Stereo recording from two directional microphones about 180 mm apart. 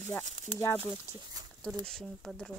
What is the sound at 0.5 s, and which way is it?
Speech, 10° left (ahead or behind).